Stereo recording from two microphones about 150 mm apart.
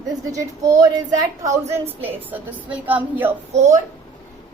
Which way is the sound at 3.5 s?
50° right (ahead or behind).